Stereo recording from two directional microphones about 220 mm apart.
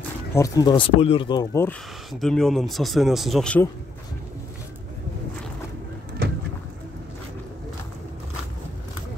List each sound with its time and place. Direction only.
0.3 s speech: 15° left (ahead or behind)
6.2 s pigeon: 45° right (ahead or behind)